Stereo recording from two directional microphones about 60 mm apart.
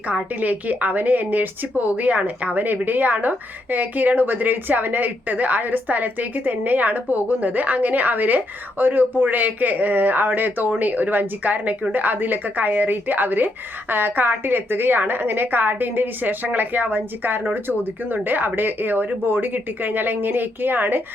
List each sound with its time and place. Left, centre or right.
0.1 s a woman's voice: right